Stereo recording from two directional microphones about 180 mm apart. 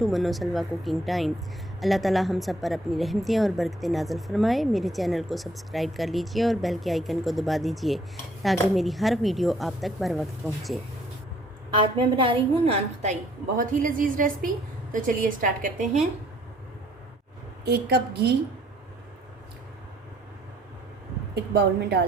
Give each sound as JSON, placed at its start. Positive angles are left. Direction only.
{"t": 0.0, "sound": "a woman's voice", "side_deg": 0}
{"t": 11.7, "sound": "a woman's voice", "side_deg": -25}
{"t": 13.6, "sound": "a woman's voice", "side_deg": -50}
{"t": 17.7, "sound": "a woman's voice", "side_deg": -60}
{"t": 21.3, "sound": "a woman's voice", "side_deg": -65}